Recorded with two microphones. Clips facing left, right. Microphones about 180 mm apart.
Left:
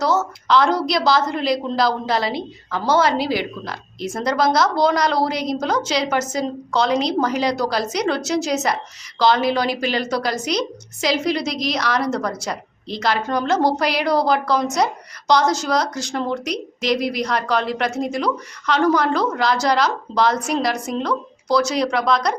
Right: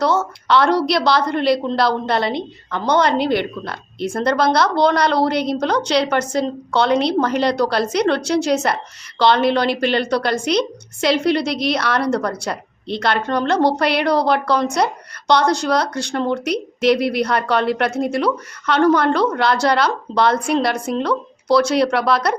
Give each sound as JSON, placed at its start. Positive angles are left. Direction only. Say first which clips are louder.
{"t": 0.0, "sound": "a woman's voice", "louder": "right 2 dB", "side_deg": 0}